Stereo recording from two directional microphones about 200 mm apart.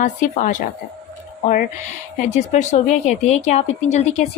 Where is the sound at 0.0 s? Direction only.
40° left (ahead or behind).